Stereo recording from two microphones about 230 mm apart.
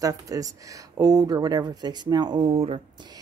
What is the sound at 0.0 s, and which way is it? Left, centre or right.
Speech, centre.